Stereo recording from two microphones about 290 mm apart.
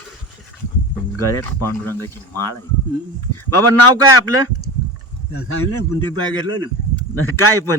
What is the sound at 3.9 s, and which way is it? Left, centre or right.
A man's voice, left.